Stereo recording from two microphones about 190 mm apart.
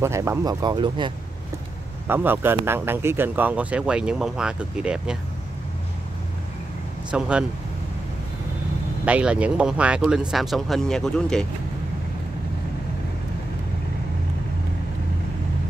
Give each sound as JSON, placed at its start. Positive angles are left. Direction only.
{"t": 0.0, "sound": "speech", "side_deg": -15}
{"t": 2.0, "sound": "speech", "side_deg": -10}
{"t": 7.1, "sound": "speech", "side_deg": -5}
{"t": 9.0, "sound": "speech", "side_deg": -5}